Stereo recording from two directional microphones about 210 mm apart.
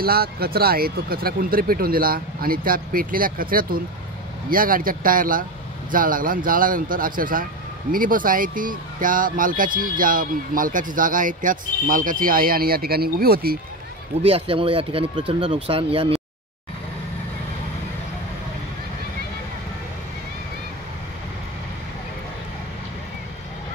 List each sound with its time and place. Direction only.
0.0 s speech: 45° right (ahead or behind)
14.2 s speech: 25° right (ahead or behind)